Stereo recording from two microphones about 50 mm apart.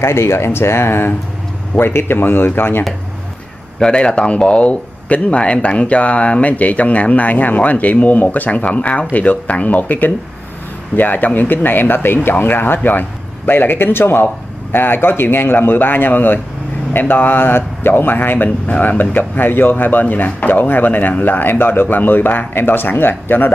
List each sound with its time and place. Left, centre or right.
0.0 s a man's voice: left
3.8 s a man's voice: centre; by 23.5 s left